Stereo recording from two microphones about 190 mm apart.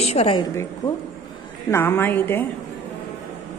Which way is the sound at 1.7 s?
15° left (ahead or behind).